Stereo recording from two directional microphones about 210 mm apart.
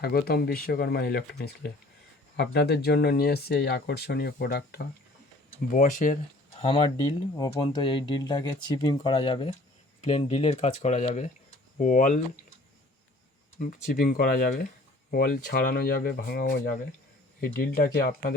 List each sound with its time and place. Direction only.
0.0 s speech: 45° left (ahead or behind); by 6.8 s 30° left (ahead or behind)
7.3 s speech: 20° left (ahead or behind); by 12.2 s 40° left (ahead or behind)
13.6 s speech: 45° left (ahead or behind)